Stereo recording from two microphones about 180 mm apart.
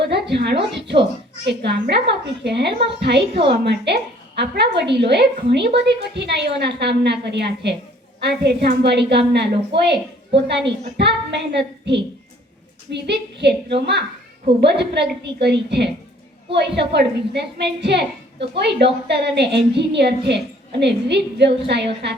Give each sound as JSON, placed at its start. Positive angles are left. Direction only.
{"t": 0.1, "sound": "a woman's voice", "side_deg": -65}